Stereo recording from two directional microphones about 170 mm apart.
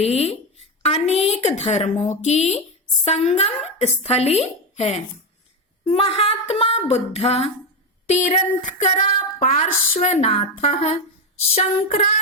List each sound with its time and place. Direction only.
0.0 s speech: 35° left (ahead or behind)
8.2 s speech: 50° left (ahead or behind)